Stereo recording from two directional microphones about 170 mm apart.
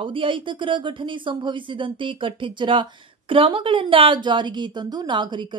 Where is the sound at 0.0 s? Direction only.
30° right (ahead or behind).